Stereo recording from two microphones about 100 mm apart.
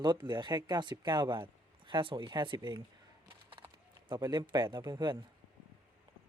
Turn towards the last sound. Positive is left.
turn(degrees=-45)  # may be behind; listen again after turning